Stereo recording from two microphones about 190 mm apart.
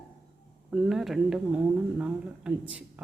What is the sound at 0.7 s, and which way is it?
Speech, centre (ahead or behind).